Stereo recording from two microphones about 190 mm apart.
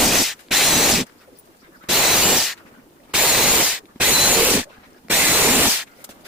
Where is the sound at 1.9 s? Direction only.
Centre (ahead or behind).